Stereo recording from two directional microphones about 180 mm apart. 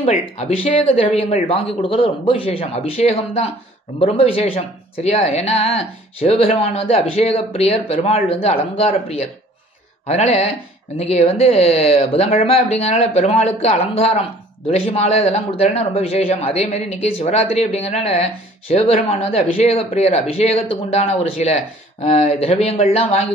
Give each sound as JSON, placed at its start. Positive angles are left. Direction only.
{"t": 0.0, "sound": "speech", "side_deg": 40}
{"t": 10.0, "sound": "speech", "side_deg": 35}